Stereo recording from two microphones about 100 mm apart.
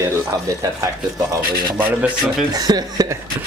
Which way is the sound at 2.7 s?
40° right (ahead or behind).